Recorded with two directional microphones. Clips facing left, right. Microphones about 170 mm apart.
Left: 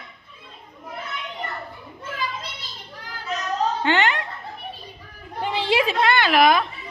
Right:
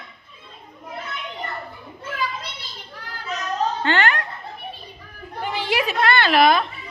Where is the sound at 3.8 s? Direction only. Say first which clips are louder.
Even; 20° left (ahead or behind).